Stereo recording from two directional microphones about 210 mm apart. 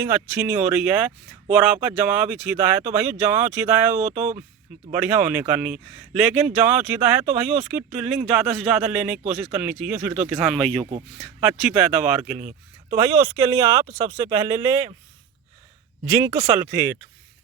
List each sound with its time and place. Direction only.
0.0 s speech: 5° right (ahead or behind)
13.3 s speech: 15° right (ahead or behind)
16.0 s speech: 10° right (ahead or behind)